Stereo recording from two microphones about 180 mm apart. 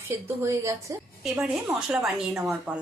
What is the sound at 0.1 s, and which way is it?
Speech, 15° right (ahead or behind).